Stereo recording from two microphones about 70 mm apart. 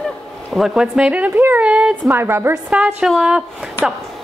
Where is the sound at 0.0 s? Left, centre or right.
Centre.